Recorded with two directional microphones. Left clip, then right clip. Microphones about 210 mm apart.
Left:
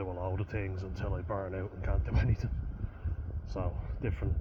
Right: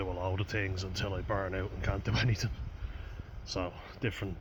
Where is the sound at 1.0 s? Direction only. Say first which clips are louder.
Right 2 dB; 30° right (ahead or behind).